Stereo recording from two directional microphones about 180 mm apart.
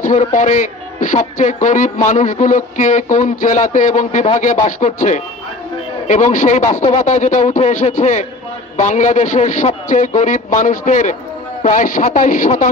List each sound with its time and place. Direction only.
0.0 s a man's voice: 45° left (ahead or behind)